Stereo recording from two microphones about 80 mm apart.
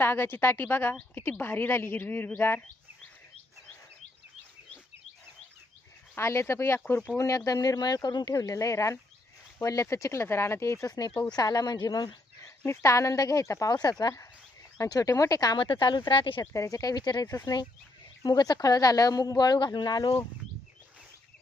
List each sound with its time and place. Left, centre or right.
0.0 s a woman's voice: left
6.1 s speech: left
7.2 s speech: left
12.4 s speech: left
13.7 s speech: left
14.8 s speech: left
15.5 s speech: left
16.4 s speech: left